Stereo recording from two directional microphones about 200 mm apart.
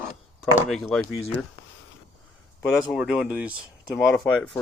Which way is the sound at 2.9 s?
5° right (ahead or behind).